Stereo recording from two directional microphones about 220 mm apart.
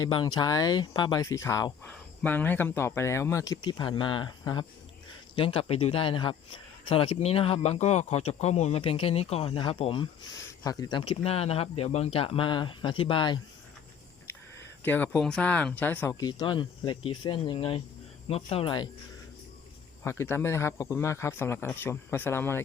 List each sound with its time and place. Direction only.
0.0 s speech: 20° left (ahead or behind)
14.8 s speech: 5° left (ahead or behind)
16.2 s speech: 20° left (ahead or behind)
20.1 s speech: 10° left (ahead or behind)